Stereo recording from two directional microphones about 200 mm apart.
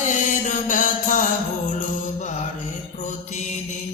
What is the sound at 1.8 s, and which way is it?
Music, 35° left (ahead or behind).